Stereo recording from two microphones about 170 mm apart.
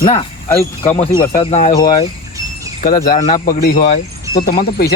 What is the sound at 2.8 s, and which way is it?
Speech, 55° left (ahead or behind).